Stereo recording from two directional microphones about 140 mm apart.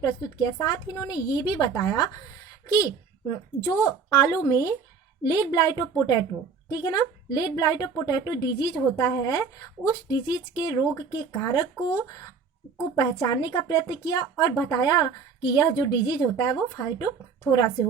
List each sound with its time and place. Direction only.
0.0 s a woman's voice: 30° left (ahead or behind)
13.0 s a woman's voice: 30° left (ahead or behind)